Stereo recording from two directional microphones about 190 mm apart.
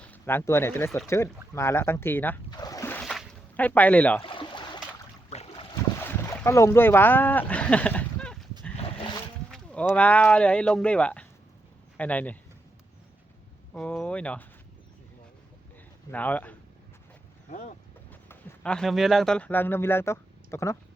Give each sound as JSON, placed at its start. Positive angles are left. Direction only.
{"t": 0.0, "sound": "speech", "side_deg": 10}
{"t": 2.5, "sound": "splash", "side_deg": 20}
{"t": 4.2, "sound": "a sound", "side_deg": 25}
{"t": 5.3, "sound": "boat", "side_deg": 35}
{"t": 6.1, "sound": "boat", "side_deg": 10}
{"t": 9.5, "sound": "speech", "side_deg": 5}
{"t": 13.7, "sound": "speech", "side_deg": 5}
{"t": 16.1, "sound": "speech", "side_deg": 10}
{"t": 18.1, "sound": "speech", "side_deg": 5}